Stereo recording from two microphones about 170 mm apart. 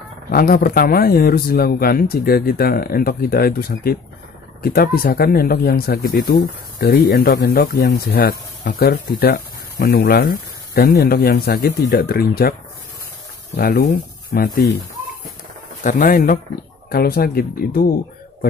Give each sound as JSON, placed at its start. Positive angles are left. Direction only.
{"t": 0.3, "sound": "speech", "side_deg": 60}
{"t": 13.6, "sound": "speech", "side_deg": 60}
{"t": 15.8, "sound": "speech", "side_deg": 50}